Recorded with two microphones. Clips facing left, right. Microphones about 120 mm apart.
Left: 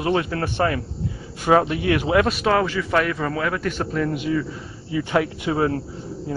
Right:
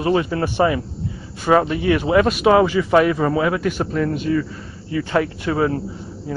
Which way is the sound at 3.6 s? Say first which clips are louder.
Right 3 dB; 5° right (ahead or behind).